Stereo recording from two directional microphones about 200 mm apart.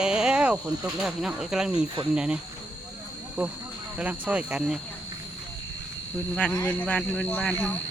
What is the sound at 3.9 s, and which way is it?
Speech, 5° right (ahead or behind).